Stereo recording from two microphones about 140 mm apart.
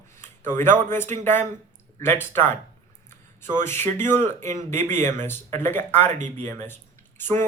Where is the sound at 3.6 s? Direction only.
15° left (ahead or behind).